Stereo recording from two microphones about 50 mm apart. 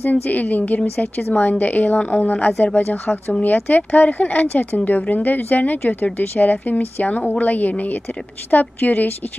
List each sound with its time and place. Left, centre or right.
0.0 s a woman's voice: left
2.0 s a woman's voice: left
2.6 s a woman's voice: left